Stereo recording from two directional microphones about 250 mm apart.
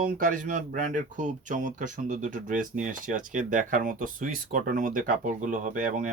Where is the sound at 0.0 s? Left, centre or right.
Right.